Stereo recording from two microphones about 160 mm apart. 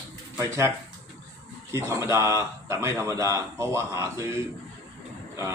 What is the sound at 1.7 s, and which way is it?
Speech, 15° right (ahead or behind).